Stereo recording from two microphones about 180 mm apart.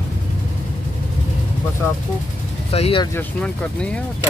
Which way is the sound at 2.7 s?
35° left (ahead or behind).